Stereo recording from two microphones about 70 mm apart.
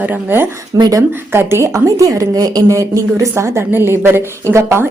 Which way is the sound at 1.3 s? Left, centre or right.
Right.